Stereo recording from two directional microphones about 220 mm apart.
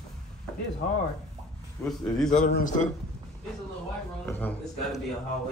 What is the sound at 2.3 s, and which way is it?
Speech, 35° left (ahead or behind).